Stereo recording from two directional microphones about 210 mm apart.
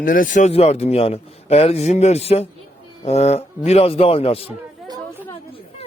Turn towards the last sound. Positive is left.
turn(degrees=-20)  # may be behind; listen again after turning